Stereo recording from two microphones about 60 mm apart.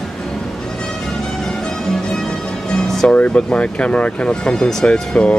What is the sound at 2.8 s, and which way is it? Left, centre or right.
Music, centre.